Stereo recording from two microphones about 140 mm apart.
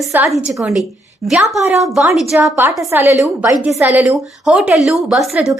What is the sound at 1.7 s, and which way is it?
Speech, centre (ahead or behind).